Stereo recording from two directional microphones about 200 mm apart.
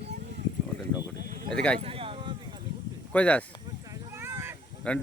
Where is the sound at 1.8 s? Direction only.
30° right (ahead or behind).